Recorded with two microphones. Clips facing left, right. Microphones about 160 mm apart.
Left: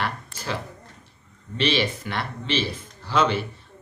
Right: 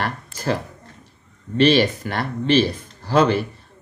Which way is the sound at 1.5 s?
45° right (ahead or behind).